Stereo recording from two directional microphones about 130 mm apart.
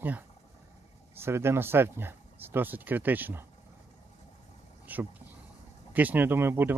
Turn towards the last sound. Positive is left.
turn(degrees=-15)  # may be behind; listen again after turning